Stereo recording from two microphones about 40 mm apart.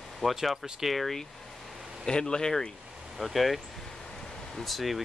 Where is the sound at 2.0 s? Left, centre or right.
Centre.